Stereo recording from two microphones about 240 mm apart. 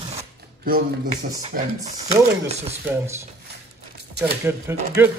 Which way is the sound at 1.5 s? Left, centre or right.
Right.